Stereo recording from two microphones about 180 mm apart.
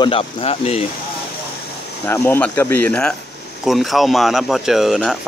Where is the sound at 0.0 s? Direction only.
30° left (ahead or behind).